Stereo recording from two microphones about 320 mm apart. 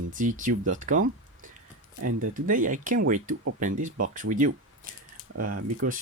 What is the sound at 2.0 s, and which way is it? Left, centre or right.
Speech, right.